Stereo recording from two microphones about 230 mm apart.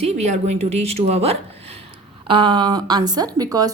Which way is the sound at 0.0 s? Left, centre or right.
Right.